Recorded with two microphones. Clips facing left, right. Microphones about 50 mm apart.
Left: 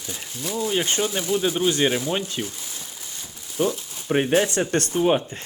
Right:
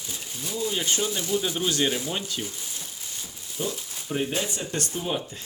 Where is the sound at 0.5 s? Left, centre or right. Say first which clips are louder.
Left 4 dB; left.